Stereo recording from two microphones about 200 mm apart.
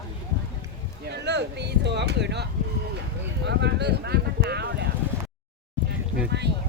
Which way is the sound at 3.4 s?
60° right (ahead or behind).